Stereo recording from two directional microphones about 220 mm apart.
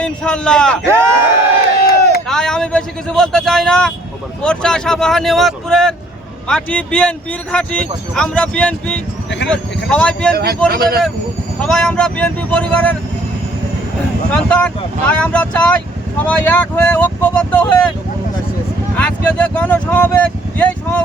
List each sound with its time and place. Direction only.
0.0 s speech: 5° left (ahead or behind)
0.9 s speech: 10° right (ahead or behind)
2.2 s vehicle: 5° left (ahead or behind)
4.4 s speech: 5° left (ahead or behind)
10.3 s speech: 45° right (ahead or behind)
11.6 s speech: 5° left (ahead or behind)
14.3 s speech: 5° left (ahead or behind)
18.9 s speech: 5° left (ahead or behind)